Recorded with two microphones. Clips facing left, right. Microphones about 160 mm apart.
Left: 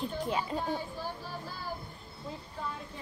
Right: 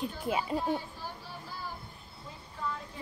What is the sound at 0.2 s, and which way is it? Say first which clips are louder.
Speech: right 2 dB; 10° right (ahead or behind).